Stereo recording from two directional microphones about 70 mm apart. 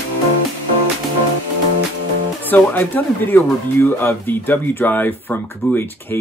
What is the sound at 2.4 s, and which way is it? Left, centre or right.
Speech, left.